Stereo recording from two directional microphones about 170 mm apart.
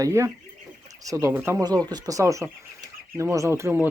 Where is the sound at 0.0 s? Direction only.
15° right (ahead or behind).